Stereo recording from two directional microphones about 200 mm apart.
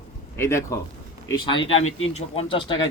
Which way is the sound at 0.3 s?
15° left (ahead or behind).